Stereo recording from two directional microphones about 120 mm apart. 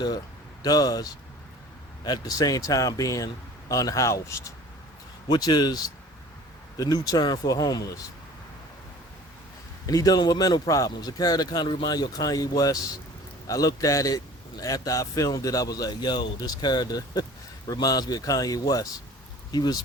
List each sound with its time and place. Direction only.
0.6 s speech: 35° left (ahead or behind)
2.0 s a man's voice: 35° left (ahead or behind)
5.3 s speech: 35° left (ahead or behind)
9.8 s a man's voice: 30° left (ahead or behind)